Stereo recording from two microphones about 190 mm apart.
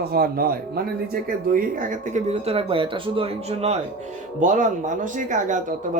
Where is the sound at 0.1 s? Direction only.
50° right (ahead or behind).